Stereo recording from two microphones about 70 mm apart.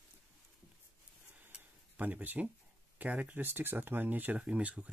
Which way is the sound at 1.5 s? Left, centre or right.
Right.